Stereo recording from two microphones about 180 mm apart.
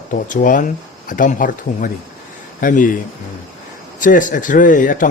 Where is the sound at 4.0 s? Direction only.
45° left (ahead or behind).